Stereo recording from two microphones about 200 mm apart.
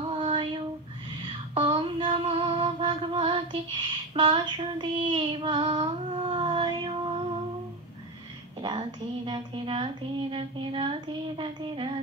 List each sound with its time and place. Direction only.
0.1 s child singing: 25° right (ahead or behind)
1.2 s music: 25° right (ahead or behind)
8.6 s speech: 25° right (ahead or behind)
10.3 s a sound: 25° right (ahead or behind)